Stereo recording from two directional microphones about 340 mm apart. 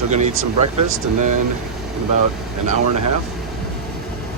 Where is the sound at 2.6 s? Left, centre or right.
Right.